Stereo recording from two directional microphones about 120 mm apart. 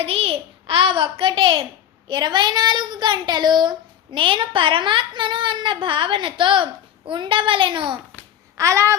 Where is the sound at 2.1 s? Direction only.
40° right (ahead or behind).